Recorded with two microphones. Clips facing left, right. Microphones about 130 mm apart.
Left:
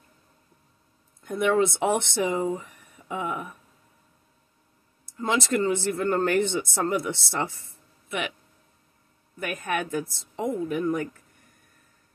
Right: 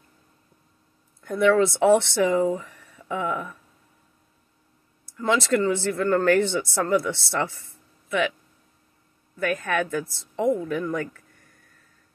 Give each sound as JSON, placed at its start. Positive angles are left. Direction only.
{"t": 1.2, "sound": "speech", "side_deg": 20}
{"t": 5.1, "sound": "speech", "side_deg": 20}
{"t": 9.4, "sound": "speech", "side_deg": 20}